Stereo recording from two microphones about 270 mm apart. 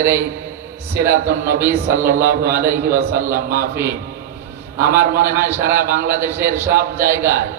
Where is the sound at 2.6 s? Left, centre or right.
Centre.